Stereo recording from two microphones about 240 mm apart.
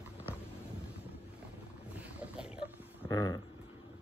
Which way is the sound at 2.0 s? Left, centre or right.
Centre.